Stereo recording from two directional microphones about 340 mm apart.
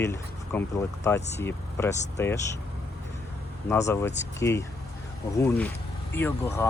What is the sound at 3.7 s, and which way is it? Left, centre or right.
Speech, centre.